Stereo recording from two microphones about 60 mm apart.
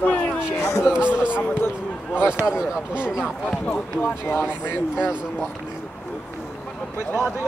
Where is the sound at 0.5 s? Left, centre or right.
Left.